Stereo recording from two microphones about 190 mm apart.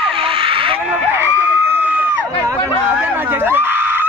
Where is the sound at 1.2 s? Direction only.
10° right (ahead or behind).